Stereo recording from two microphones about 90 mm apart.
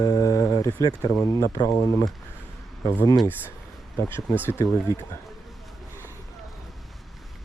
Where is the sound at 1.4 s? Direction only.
40° left (ahead or behind).